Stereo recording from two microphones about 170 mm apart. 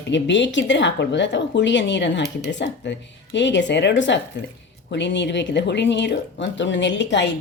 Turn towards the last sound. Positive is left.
turn(degrees=90)